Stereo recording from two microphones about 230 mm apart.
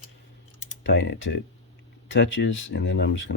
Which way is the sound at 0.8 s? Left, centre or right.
Left.